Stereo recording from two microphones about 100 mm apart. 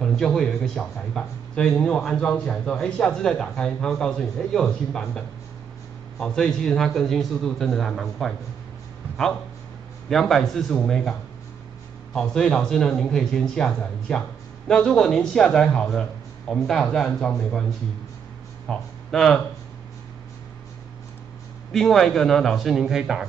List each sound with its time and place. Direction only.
0.0 s speech: 5° left (ahead or behind)
10.0 s speech: 5° left (ahead or behind)
21.7 s speech: 5° left (ahead or behind)